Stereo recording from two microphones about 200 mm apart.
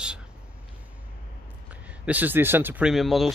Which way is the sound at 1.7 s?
5° right (ahead or behind).